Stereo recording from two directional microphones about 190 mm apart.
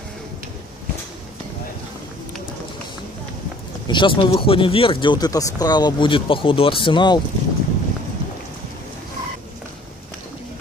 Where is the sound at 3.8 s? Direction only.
25° left (ahead or behind).